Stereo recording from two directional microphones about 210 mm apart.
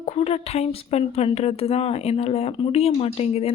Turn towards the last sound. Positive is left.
turn(degrees=30)  # may be behind; listen again after turning